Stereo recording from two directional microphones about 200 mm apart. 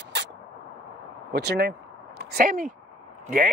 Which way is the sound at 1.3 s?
55° right (ahead or behind).